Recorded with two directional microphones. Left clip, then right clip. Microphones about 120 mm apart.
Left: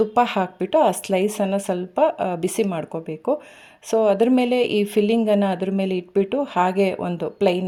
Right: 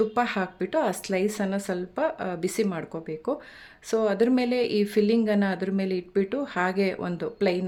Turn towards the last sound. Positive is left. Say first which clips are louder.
# left 5 dB
turn(degrees=25)  # may be behind; listen again after turning